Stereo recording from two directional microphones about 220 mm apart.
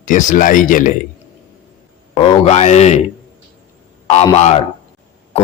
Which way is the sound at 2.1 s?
25° left (ahead or behind).